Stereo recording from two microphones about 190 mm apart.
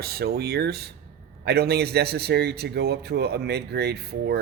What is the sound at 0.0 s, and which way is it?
Speech, 55° right (ahead or behind).